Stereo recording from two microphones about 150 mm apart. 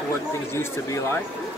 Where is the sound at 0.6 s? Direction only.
15° left (ahead or behind).